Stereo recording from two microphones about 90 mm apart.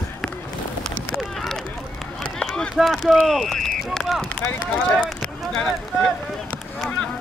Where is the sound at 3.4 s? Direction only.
5° left (ahead or behind).